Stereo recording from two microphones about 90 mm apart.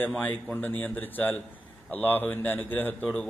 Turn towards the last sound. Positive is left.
turn(degrees=15)  # may be behind; listen again after turning